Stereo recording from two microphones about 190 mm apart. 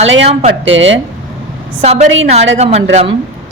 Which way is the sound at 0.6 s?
80° right.